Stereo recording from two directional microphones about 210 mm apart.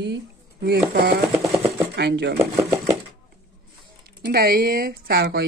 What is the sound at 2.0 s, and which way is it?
Speech, 55° right (ahead or behind).